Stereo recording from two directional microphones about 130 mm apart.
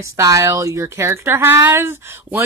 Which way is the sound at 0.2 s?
25° right (ahead or behind).